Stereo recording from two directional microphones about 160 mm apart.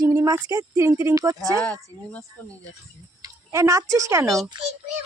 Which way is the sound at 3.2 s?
20° right (ahead or behind).